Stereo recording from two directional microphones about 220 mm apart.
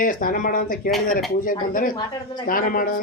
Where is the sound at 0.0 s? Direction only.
40° left (ahead or behind).